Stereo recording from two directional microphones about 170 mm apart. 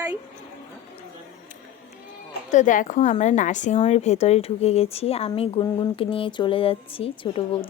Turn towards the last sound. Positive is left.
turn(degrees=30)  # may be behind; listen again after turning